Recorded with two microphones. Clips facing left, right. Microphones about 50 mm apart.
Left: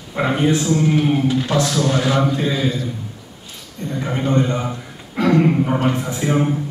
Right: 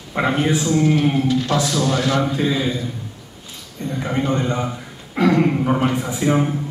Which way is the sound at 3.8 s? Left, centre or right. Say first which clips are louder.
Even; right.